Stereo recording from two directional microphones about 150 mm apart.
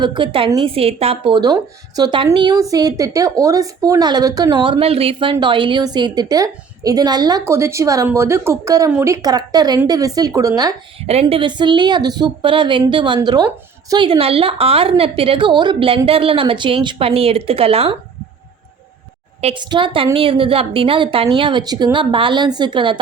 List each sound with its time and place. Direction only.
0.0 s a woman's voice: 35° right (ahead or behind)
11.0 s a woman's voice: 45° right (ahead or behind)
19.5 s a woman's voice: 30° right (ahead or behind)